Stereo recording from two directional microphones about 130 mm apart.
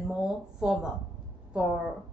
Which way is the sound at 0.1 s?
5° right (ahead or behind).